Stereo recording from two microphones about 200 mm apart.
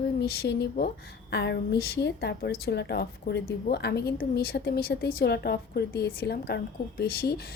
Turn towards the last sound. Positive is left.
turn(degrees=55)  # may be behind; listen again after turning